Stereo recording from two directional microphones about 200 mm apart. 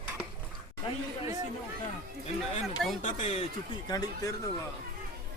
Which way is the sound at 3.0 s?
35° left (ahead or behind).